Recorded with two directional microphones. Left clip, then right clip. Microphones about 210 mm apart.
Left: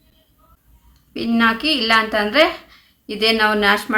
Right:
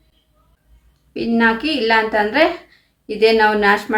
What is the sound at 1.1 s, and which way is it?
A woman's voice, 20° left (ahead or behind).